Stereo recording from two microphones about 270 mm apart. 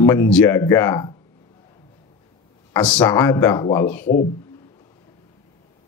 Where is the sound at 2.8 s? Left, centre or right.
Centre.